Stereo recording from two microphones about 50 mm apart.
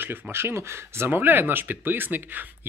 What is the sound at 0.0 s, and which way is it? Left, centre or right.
Speech, right.